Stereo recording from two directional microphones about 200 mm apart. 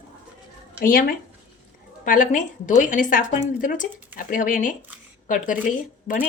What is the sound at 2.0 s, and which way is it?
Speech, 40° left (ahead or behind).